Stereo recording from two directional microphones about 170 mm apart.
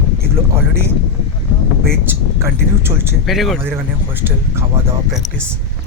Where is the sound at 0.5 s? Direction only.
15° right (ahead or behind).